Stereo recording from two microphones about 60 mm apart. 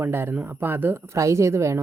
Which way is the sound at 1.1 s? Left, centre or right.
Right.